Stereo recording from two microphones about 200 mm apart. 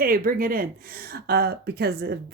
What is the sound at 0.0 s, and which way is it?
Speech, 45° right (ahead or behind).